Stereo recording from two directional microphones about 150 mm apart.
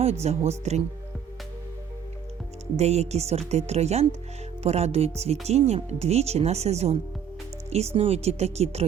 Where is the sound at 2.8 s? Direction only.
45° right (ahead or behind).